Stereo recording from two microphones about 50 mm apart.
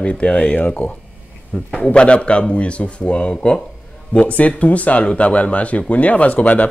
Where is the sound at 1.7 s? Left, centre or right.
Left.